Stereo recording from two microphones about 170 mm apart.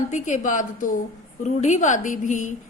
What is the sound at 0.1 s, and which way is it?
Speech, 50° left (ahead or behind).